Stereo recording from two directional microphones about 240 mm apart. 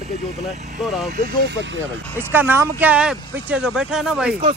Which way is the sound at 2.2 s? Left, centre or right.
Centre.